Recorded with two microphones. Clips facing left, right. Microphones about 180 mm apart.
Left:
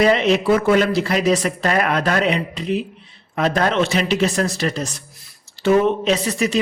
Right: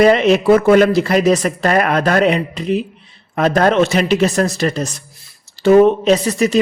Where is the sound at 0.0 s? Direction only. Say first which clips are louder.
Right 5 dB; 50° right (ahead or behind).